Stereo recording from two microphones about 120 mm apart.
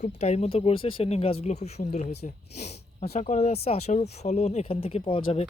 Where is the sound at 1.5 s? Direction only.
70° left (ahead or behind).